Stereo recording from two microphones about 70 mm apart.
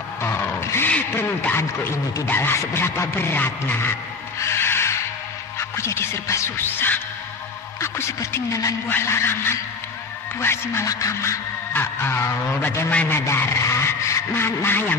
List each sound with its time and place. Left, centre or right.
0.6 s a sound: left
0.8 s a sound: left
1.2 s speech: left
4.4 s music: left
5.6 s speech: left
6.6 s music: left
7.8 s speech: left
9.0 s speech: left
10.9 s speech: left
11.7 s speech: left